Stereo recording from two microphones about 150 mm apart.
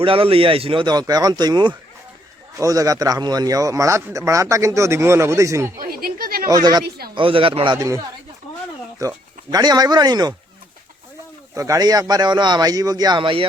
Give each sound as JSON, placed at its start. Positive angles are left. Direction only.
{"t": 0.0, "sound": "a man's voice", "side_deg": -35}
{"t": 5.8, "sound": "a sound", "side_deg": -75}
{"t": 6.5, "sound": "a man's voice", "side_deg": -25}
{"t": 6.8, "sound": "speech", "side_deg": -90}
{"t": 7.2, "sound": "speech", "side_deg": -35}
{"t": 11.5, "sound": "a man's voice", "side_deg": -20}